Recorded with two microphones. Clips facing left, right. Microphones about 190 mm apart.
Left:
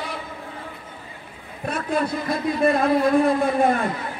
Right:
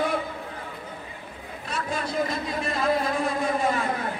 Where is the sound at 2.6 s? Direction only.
55° left (ahead or behind).